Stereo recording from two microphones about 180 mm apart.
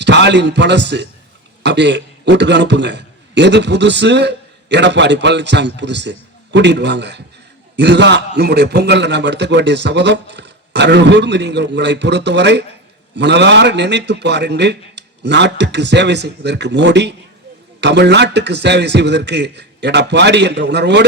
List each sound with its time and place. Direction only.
0.0 s a man's voice: 75° right (ahead or behind)